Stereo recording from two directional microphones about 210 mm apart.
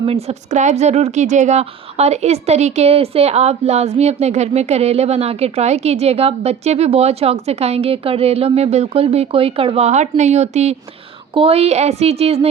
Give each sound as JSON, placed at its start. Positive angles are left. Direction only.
{"t": 0.0, "sound": "a woman's voice", "side_deg": -30}